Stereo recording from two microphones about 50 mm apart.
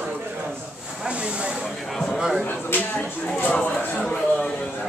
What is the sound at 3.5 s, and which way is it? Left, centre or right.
Speech, centre.